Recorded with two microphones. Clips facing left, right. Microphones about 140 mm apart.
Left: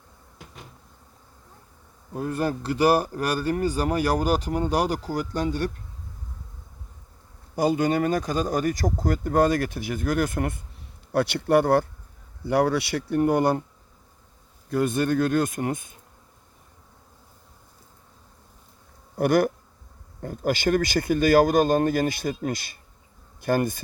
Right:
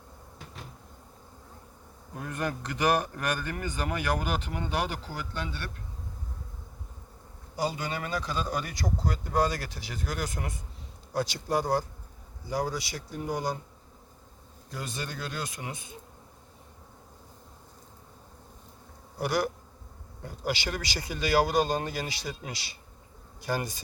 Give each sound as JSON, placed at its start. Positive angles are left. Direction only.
{"t": 2.1, "sound": "a man's voice", "side_deg": 30}
{"t": 7.5, "sound": "speech", "side_deg": 50}
{"t": 14.7, "sound": "speech", "side_deg": 55}
{"t": 19.2, "sound": "speech", "side_deg": 55}